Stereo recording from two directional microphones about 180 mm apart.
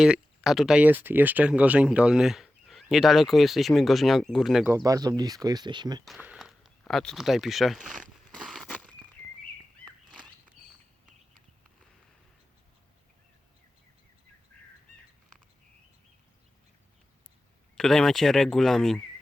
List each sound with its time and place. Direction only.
0.0 s speech: 5° right (ahead or behind)
4.7 s speech: 20° right (ahead or behind)
6.1 s speech: 5° right (ahead or behind)
8.4 s a sound: centre (ahead or behind)
17.7 s speech: 5° left (ahead or behind)